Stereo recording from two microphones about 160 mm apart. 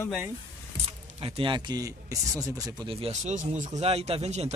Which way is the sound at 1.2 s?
35° right (ahead or behind).